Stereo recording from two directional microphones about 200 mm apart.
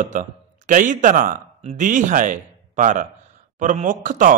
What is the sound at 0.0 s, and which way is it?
A man's voice, 40° right (ahead or behind).